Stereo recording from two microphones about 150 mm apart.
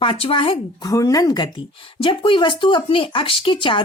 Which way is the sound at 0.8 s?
25° left (ahead or behind).